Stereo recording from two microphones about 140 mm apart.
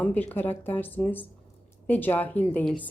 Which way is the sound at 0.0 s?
10° left (ahead or behind).